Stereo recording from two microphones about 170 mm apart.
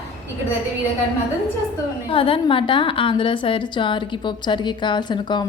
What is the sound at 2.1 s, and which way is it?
A woman's voice, 30° left (ahead or behind).